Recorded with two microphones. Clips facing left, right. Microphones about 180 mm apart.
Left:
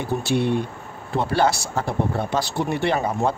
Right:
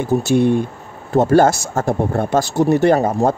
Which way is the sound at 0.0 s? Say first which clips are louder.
Right 7 dB; 45° right (ahead or behind).